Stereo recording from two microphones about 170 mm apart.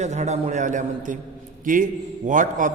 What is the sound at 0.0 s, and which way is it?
A man's voice, 40° right (ahead or behind).